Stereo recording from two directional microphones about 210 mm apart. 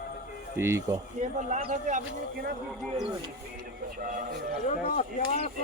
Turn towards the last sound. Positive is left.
turn(degrees=35)  # may be behind; listen again after turning